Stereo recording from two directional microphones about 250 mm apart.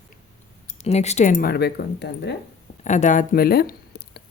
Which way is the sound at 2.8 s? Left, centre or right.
Left.